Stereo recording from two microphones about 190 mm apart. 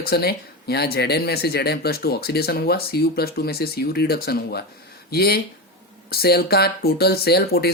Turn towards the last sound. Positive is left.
turn(degrees=55)  # may be behind; listen again after turning